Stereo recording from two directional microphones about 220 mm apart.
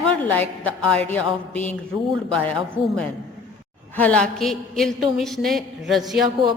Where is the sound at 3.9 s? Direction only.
5° left (ahead or behind).